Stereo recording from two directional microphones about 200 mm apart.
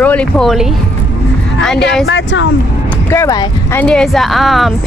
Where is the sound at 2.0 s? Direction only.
65° left (ahead or behind).